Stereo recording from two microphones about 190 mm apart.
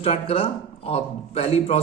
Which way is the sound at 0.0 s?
30° left (ahead or behind).